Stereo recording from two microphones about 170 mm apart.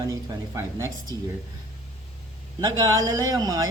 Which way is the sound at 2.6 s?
25° right (ahead or behind).